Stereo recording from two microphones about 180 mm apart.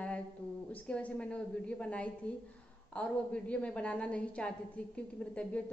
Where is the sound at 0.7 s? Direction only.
5° left (ahead or behind).